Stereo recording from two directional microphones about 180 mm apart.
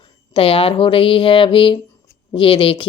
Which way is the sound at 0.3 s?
30° left (ahead or behind).